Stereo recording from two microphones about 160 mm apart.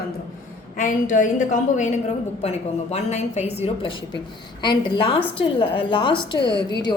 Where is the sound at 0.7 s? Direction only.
55° left (ahead or behind).